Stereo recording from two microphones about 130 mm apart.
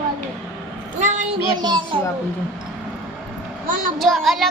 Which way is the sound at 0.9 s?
65° right (ahead or behind).